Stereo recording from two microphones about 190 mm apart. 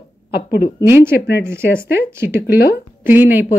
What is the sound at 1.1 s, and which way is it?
Speech, 60° left (ahead or behind).